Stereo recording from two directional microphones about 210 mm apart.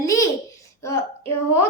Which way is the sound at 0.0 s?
15° left (ahead or behind).